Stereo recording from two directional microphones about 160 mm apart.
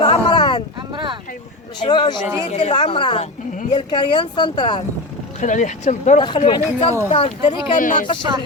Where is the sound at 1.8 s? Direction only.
30° left (ahead or behind).